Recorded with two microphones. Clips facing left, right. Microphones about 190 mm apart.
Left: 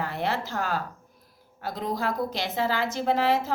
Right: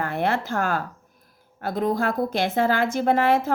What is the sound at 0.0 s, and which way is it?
A woman's voice, 55° right (ahead or behind).